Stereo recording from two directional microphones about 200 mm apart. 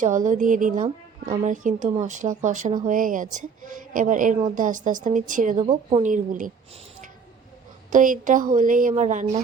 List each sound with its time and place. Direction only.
0.0 s a woman's voice: 40° right (ahead or behind)
7.9 s a woman's voice: 40° right (ahead or behind)